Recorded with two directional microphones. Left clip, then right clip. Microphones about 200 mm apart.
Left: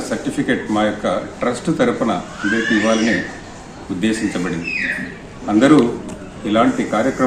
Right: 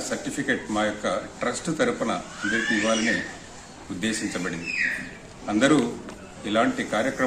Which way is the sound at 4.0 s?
10° right (ahead or behind).